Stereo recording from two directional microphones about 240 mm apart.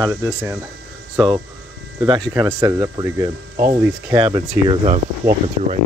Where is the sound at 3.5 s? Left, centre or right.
Right.